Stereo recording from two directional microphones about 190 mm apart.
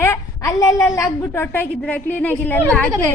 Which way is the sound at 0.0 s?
15° left (ahead or behind).